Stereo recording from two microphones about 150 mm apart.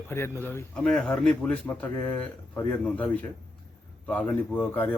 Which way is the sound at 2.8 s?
10° left (ahead or behind).